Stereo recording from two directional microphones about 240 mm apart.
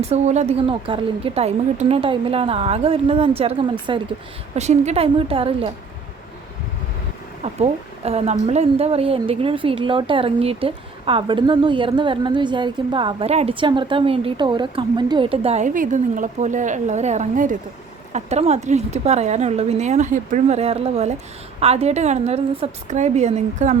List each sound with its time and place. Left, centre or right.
0.1 s a woman's voice: right
7.4 s a woman's voice: right